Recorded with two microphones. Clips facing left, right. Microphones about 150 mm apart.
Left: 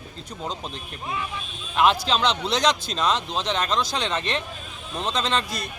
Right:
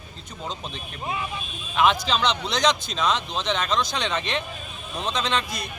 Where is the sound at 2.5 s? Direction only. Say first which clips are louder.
Right 1 dB; 30° left (ahead or behind).